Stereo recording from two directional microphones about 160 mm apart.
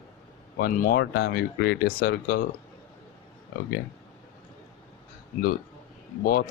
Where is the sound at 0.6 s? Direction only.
65° left (ahead or behind).